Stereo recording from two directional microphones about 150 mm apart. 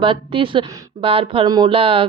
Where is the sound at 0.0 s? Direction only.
35° right (ahead or behind).